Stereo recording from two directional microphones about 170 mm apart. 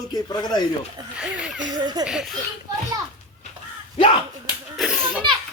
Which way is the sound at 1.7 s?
25° right (ahead or behind).